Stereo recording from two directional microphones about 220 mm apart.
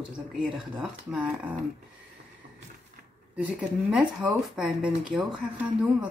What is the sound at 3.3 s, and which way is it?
Speech, 5° right (ahead or behind).